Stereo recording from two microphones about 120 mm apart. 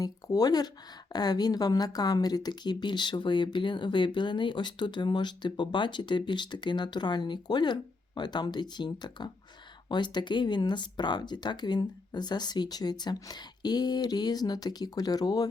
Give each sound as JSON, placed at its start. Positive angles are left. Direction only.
{"t": 0.0, "sound": "speech", "side_deg": 30}